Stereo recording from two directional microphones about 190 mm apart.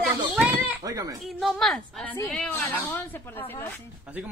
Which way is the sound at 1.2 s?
Centre (ahead or behind).